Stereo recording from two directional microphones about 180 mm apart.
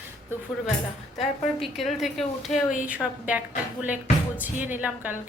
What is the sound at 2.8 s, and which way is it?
Speech, 10° right (ahead or behind).